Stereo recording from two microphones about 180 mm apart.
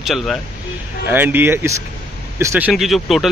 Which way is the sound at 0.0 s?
Centre (ahead or behind).